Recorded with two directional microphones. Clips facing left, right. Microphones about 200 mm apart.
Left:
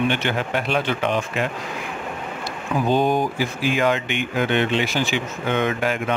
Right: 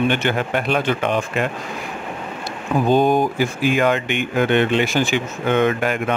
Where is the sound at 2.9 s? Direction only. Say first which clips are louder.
Right 4 dB; 50° right (ahead or behind).